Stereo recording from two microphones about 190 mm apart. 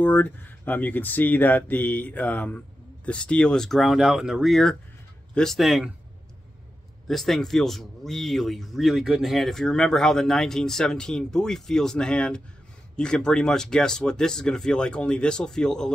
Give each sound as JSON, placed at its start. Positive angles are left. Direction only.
{"t": 0.0, "sound": "speech", "side_deg": 10}
{"t": 7.1, "sound": "speech", "side_deg": 0}